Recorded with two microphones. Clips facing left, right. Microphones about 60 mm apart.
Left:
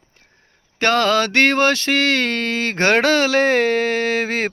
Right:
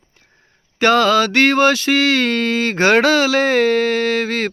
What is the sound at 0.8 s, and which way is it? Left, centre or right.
Mantra, centre.